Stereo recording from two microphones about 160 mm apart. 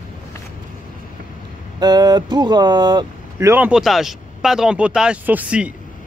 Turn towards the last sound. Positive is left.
turn(degrees=-10)  # may be behind; listen again after turning